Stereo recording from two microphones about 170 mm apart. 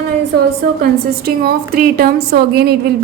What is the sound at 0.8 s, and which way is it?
A woman's voice, 65° right (ahead or behind).